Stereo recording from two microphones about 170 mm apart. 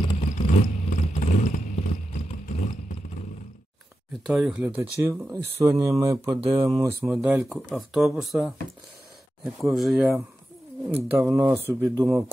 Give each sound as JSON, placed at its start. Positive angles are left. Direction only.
{"t": 0.2, "sound": "vehicle", "side_deg": 45}
{"t": 4.3, "sound": "speech", "side_deg": 0}
{"t": 7.2, "sound": "speech", "side_deg": -5}
{"t": 11.1, "sound": "speech", "side_deg": -15}